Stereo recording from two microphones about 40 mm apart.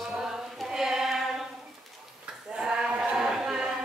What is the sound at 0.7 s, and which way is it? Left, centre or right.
Choir, centre.